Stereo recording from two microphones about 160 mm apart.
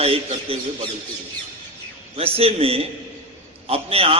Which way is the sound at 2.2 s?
35° right (ahead or behind).